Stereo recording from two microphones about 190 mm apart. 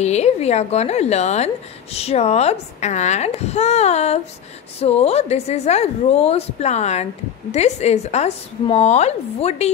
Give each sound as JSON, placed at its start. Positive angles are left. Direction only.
{"t": 0.0, "sound": "speech", "side_deg": 35}